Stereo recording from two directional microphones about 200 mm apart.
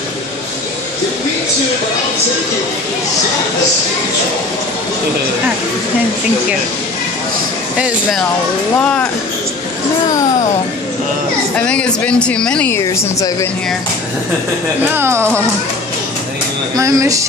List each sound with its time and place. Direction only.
7.7 s speech: 5° right (ahead or behind)
8.7 s speech: 5° left (ahead or behind)
11.5 s speech: 5° left (ahead or behind)
14.8 s speech: 10° right (ahead or behind)
16.7 s speech: 15° right (ahead or behind)